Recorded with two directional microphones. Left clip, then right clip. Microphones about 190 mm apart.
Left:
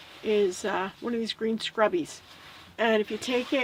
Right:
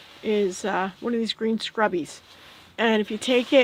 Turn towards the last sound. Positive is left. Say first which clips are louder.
# right 8 dB
turn(degrees=-45)  # may be behind; listen again after turning